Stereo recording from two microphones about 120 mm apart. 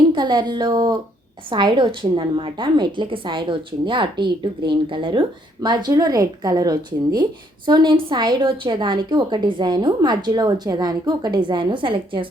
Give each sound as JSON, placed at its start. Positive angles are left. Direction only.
{"t": 0.1, "sound": "a woman's voice", "side_deg": -40}